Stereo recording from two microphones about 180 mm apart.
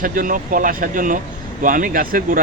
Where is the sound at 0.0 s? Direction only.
50° right (ahead or behind).